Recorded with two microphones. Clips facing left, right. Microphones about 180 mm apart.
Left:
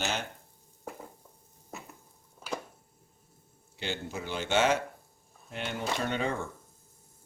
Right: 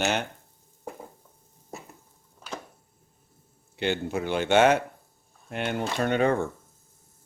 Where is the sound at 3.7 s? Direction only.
60° right (ahead or behind).